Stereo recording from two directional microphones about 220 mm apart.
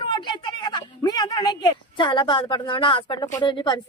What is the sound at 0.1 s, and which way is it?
Speech, 20° left (ahead or behind).